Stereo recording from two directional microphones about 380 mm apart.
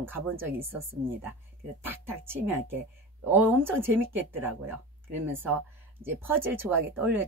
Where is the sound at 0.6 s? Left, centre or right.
Right.